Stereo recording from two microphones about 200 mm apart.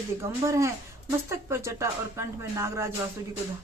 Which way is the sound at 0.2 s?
15° right (ahead or behind).